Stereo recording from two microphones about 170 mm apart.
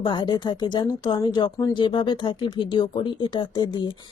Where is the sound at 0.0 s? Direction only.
25° left (ahead or behind).